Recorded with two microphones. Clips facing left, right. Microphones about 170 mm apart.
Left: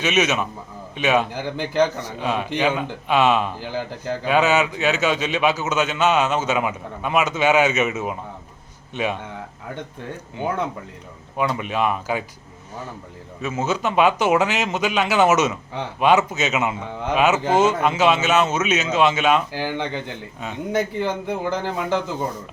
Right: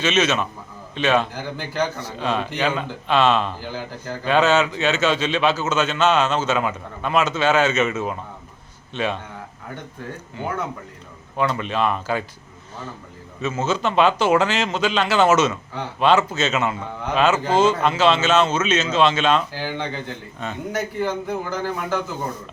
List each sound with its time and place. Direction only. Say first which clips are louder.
0.0 s a man's voice: even; 15° left (ahead or behind)
11.3 s a man's voice: even; 10° left (ahead or behind)
13.7 s a man's voice: even; 10° left (ahead or behind)